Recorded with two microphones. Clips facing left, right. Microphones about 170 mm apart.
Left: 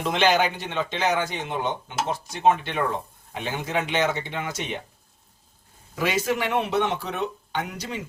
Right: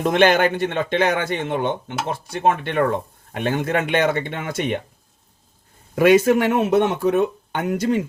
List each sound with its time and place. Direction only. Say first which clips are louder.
0.0 s a man's voice: right 5 dB; 55° right (ahead or behind)
6.0 s speech: right 11 dB; 55° right (ahead or behind)